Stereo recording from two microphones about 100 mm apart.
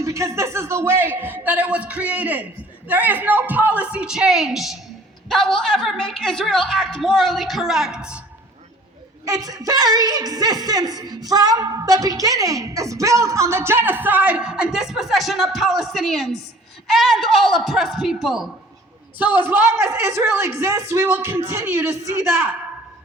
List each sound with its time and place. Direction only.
0.0 s a woman's voice: 30° right (ahead or behind); by 8.2 s 10° right (ahead or behind)
9.2 s a woman's voice: 35° right (ahead or behind); by 18.5 s 5° right (ahead or behind)
19.2 s a man's voice: 20° right (ahead or behind)